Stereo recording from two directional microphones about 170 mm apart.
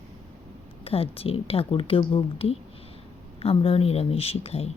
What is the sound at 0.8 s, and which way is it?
Speech, 35° left (ahead or behind).